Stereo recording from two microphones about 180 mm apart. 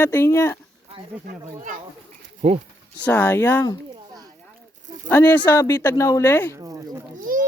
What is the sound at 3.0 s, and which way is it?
Speech, 10° left (ahead or behind).